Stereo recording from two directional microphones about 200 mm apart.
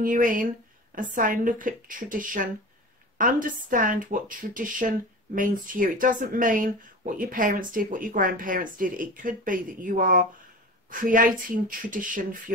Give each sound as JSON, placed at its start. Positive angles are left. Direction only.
{"t": 0.0, "sound": "speech", "side_deg": -40}